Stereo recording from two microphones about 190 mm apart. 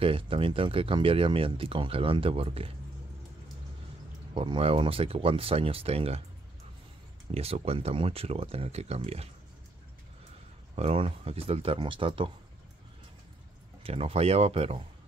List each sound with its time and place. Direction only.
0.0 s speech: 30° right (ahead or behind)
4.3 s speech: 30° right (ahead or behind)
7.2 s speech: 35° right (ahead or behind)
10.8 s speech: 30° right (ahead or behind)
13.8 s speech: 30° right (ahead or behind)